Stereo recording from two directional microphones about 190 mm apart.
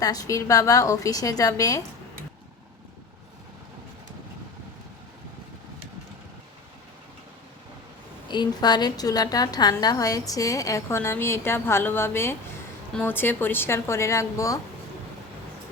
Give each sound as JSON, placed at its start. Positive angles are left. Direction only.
{"t": 0.0, "sound": "a woman's voice", "side_deg": 20}
{"t": 8.3, "sound": "a woman's voice", "side_deg": 20}